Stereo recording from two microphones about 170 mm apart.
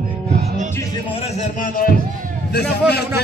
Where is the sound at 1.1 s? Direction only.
35° left (ahead or behind).